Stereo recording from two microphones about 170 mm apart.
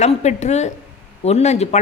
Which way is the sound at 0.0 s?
40° left (ahead or behind).